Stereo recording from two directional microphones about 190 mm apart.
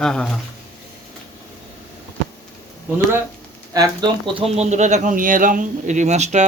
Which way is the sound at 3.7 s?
20° right (ahead or behind).